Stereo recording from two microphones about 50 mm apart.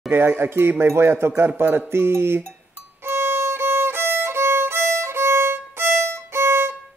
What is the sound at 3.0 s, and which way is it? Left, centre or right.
Violin, right.